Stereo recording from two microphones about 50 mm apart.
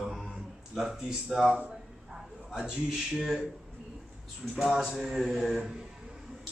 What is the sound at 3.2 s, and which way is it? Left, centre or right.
Speech, centre.